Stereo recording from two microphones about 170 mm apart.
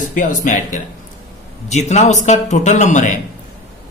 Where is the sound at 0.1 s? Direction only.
50° left (ahead or behind).